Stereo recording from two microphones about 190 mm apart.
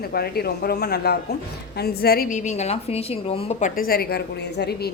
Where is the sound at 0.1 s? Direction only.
55° left (ahead or behind).